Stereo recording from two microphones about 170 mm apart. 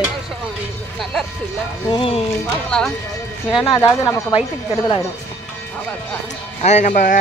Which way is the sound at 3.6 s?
25° left (ahead or behind).